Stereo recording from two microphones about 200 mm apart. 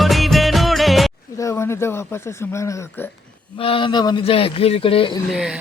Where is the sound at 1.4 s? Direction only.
15° left (ahead or behind).